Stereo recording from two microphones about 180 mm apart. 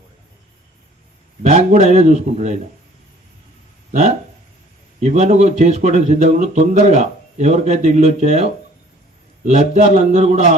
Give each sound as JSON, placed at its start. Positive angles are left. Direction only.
{"t": 1.4, "sound": "a man's voice", "side_deg": -40}
{"t": 4.9, "sound": "a man's voice", "side_deg": -40}